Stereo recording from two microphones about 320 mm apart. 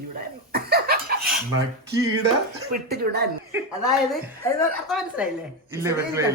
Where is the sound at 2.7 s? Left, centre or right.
Right.